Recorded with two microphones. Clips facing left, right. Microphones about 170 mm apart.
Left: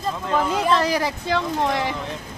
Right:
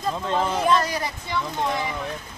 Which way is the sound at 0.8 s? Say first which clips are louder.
Left 5 dB; 80° left.